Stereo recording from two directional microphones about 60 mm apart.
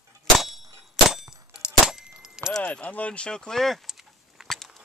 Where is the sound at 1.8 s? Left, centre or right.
Centre.